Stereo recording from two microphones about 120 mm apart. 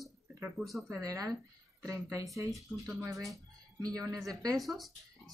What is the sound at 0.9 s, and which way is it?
Speech, 30° right (ahead or behind).